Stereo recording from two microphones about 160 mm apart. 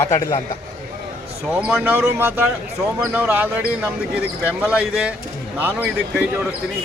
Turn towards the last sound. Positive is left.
turn(degrees=-10)  # may be behind; listen again after turning